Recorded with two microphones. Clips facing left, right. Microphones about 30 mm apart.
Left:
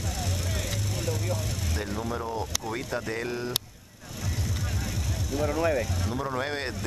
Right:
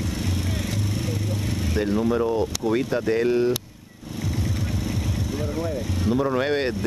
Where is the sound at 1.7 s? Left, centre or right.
Right.